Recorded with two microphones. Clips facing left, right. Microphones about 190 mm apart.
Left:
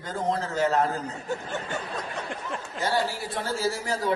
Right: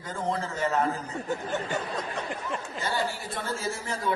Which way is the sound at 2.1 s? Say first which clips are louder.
Right 1 dB; centre (ahead or behind).